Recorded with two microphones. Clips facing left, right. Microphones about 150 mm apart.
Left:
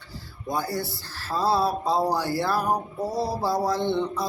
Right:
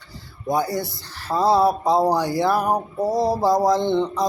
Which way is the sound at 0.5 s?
15° right (ahead or behind).